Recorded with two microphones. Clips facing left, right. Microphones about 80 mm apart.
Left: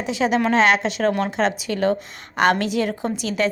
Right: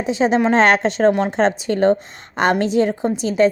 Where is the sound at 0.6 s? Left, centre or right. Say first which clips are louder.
Right 4 dB; right.